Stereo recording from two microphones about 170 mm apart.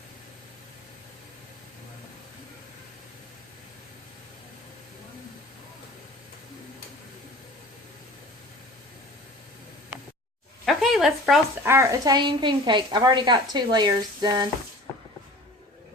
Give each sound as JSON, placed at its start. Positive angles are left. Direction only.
{"t": 10.7, "sound": "speech", "side_deg": 0}
{"t": 11.6, "sound": "a woman's voice", "side_deg": -15}